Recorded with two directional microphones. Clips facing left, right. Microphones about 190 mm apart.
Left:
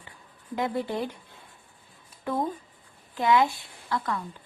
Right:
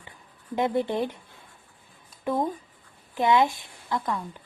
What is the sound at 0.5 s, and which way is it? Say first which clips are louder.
Speech: right 4 dB; 20° right (ahead or behind).